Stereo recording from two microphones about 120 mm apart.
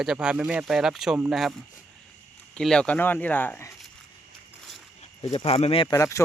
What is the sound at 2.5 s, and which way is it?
Speech, 5° left (ahead or behind).